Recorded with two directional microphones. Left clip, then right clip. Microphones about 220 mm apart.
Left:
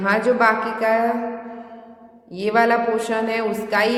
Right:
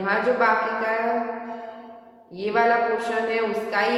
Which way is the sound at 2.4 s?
50° left (ahead or behind).